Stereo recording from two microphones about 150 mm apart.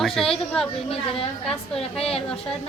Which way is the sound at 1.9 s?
40° left (ahead or behind).